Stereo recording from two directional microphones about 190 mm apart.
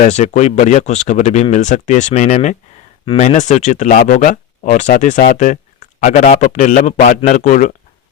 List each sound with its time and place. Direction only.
0.0 s speech: 40° left (ahead or behind)